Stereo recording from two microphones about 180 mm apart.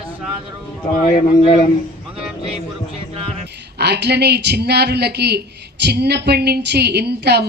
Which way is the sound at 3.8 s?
65° right (ahead or behind).